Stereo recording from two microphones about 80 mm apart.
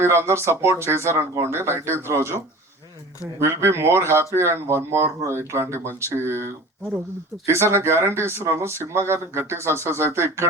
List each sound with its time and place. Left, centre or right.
0.0 s speech: right
3.4 s speech: right